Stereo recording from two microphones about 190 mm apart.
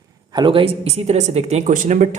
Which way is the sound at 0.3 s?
25° right (ahead or behind).